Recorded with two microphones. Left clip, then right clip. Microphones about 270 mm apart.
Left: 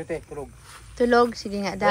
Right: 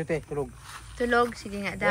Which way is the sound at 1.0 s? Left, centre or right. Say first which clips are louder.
Left 5 dB; centre.